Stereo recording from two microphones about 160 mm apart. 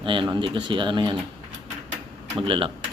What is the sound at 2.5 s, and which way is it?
Speech, 35° right (ahead or behind).